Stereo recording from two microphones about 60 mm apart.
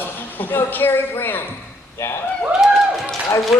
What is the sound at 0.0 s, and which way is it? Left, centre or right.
A man's voice, left.